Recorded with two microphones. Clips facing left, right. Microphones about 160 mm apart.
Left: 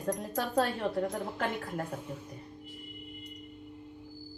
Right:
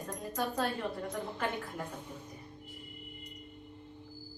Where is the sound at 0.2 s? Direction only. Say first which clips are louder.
Right 1 dB; 75° left (ahead or behind).